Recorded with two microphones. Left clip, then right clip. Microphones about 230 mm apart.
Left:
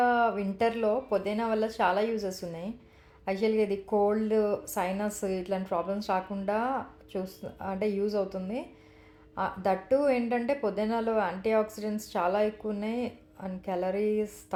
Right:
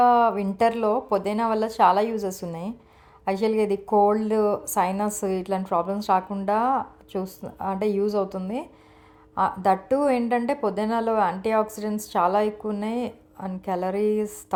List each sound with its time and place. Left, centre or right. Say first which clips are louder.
0.0 s speech: right 7 dB; right